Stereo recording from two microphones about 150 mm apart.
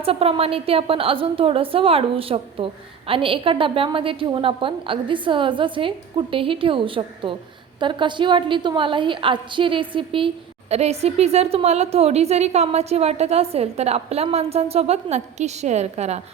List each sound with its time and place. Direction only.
0.0 s a woman's voice: 40° right (ahead or behind)